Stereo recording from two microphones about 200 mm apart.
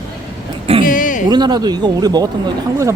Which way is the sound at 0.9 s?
40° left (ahead or behind).